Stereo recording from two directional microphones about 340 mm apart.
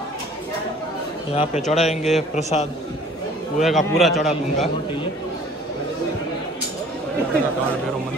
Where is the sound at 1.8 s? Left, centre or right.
Centre.